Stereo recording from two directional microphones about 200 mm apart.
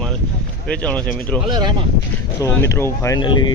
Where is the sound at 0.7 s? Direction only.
5° left (ahead or behind).